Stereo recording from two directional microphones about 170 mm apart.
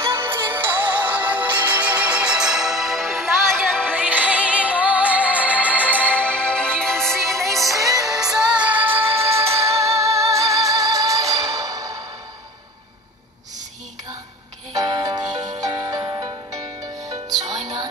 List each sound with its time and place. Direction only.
0.0 s music: 15° right (ahead or behind); by 3.9 s 5° left (ahead or behind)
3.9 s music: 10° right (ahead or behind)
6.0 s music: 5° left (ahead or behind)
9.2 s music: 15° right (ahead or behind)
14.7 s music: 25° right (ahead or behind)